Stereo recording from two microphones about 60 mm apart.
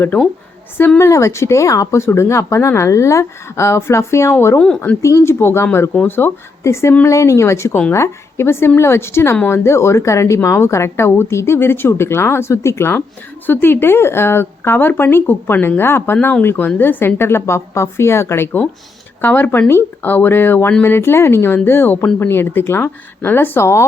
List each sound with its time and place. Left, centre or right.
0.9 s speech: left
2.0 s a woman's voice: left
6.6 s a woman's voice: left
13.5 s a woman's voice: left